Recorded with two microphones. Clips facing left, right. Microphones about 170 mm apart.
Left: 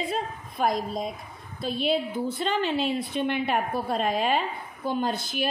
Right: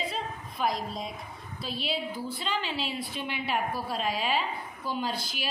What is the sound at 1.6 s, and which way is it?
A woman's voice, 50° left (ahead or behind).